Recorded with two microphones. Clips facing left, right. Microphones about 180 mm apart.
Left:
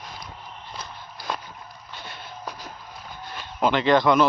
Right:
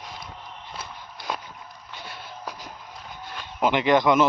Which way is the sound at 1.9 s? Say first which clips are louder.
Even; 10° right (ahead or behind).